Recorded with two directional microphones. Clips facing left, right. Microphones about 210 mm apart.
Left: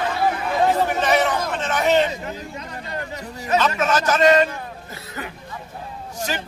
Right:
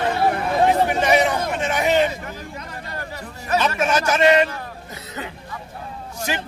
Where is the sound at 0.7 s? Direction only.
10° right (ahead or behind).